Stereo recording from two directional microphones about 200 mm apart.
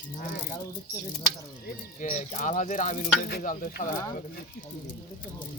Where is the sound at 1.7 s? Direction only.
40° left (ahead or behind).